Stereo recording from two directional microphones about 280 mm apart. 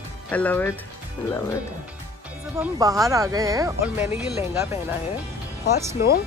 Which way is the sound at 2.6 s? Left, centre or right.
Centre.